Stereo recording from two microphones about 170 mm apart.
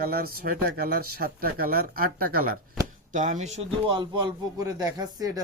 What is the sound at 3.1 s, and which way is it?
Speech, 45° right (ahead or behind).